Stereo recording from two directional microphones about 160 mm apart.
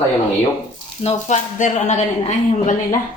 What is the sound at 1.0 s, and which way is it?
A woman's voice, 45° left (ahead or behind).